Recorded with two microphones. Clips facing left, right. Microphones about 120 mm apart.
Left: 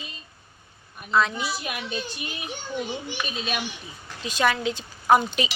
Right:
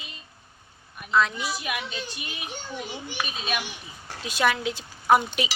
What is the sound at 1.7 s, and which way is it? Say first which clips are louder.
Speech: left 1 dB; 30° left (ahead or behind).